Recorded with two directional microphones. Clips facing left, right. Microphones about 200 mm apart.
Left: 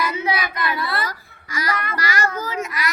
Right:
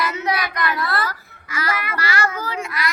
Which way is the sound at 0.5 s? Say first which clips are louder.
Right 1 dB; 5° left (ahead or behind).